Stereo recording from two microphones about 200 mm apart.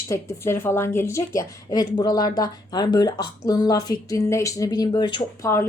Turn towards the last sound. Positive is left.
turn(degrees=15)  # may be behind; listen again after turning